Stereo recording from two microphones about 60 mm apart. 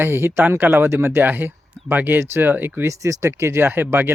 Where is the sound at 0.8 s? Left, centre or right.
Right.